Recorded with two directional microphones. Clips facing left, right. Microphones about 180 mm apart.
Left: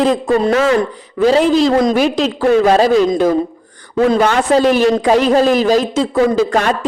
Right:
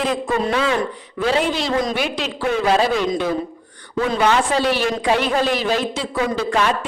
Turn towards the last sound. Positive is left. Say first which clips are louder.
# left 5 dB
turn(degrees=45)  # may be behind; listen again after turning